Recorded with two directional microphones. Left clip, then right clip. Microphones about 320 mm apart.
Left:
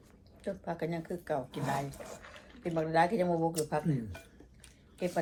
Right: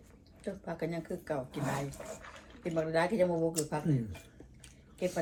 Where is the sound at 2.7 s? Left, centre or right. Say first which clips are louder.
Left 2 dB; centre.